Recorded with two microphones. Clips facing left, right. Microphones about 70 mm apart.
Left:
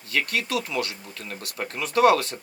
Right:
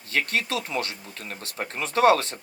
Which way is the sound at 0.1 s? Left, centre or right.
Right.